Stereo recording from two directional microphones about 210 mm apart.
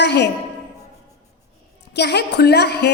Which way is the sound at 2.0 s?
55° left (ahead or behind).